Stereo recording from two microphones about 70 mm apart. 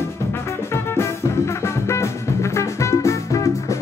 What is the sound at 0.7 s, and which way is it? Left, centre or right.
Music, left.